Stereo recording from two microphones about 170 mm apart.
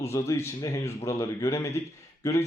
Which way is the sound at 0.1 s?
15° left (ahead or behind).